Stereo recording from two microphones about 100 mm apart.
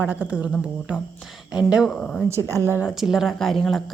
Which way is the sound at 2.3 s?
30° right (ahead or behind).